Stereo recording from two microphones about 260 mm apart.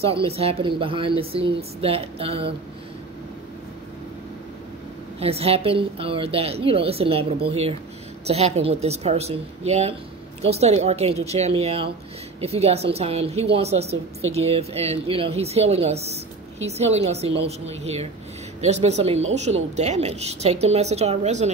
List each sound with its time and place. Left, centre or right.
0.0 s speech: right
5.2 s speech: right